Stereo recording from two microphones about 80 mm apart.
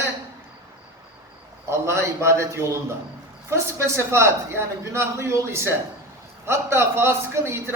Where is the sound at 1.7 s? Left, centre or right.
Right.